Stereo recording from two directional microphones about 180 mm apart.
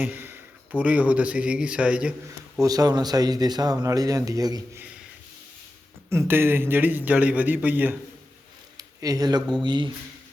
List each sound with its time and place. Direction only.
0.0 s a man's voice: 10° right (ahead or behind)
2.6 s speech: 20° right (ahead or behind)
6.1 s a man's voice: 15° right (ahead or behind)
8.8 s speech: 20° right (ahead or behind)